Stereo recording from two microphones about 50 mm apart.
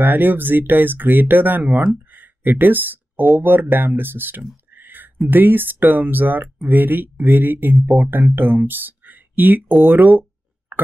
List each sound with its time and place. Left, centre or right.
0.0 s speech: right
2.0 s a sound: right
3.3 s speech: right
4.7 s whispering: right
5.3 s speech: right